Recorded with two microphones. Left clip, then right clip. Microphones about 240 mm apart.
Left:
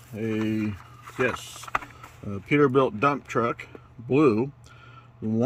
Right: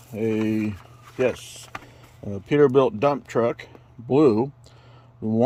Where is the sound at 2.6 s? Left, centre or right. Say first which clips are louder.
Right 4 dB; right.